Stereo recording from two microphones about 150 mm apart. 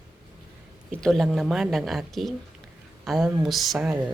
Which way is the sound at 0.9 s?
5° left (ahead or behind).